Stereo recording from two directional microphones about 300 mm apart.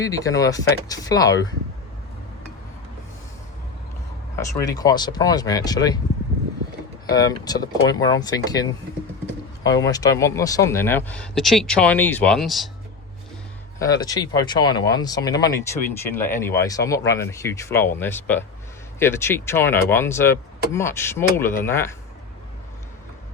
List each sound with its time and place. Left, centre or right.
0.0 s speech: centre
4.4 s speech: centre
7.1 s speech: centre
13.7 s speech: centre